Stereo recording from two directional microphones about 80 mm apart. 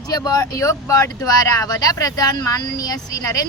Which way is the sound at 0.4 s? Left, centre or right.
Left.